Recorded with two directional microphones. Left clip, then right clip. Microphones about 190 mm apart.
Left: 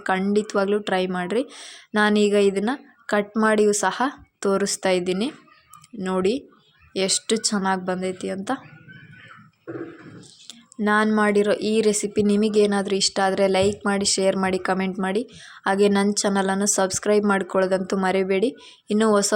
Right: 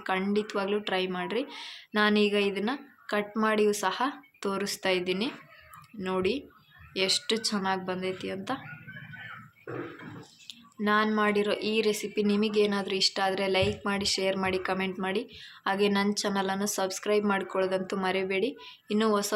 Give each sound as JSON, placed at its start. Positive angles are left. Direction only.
{"t": 0.0, "sound": "a woman's voice", "side_deg": 40}
{"t": 10.4, "sound": "a woman's voice", "side_deg": 45}